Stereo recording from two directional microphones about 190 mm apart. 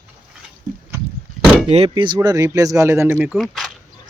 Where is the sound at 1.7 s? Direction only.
30° right (ahead or behind); by 3.7 s centre (ahead or behind).